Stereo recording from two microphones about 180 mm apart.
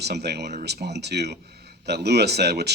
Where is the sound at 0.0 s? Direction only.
65° right (ahead or behind).